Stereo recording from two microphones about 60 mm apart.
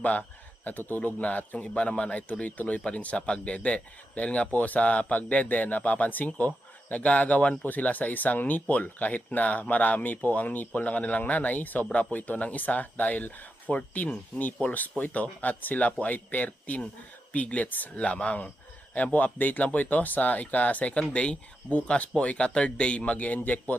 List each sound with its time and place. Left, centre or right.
0.0 s speech: left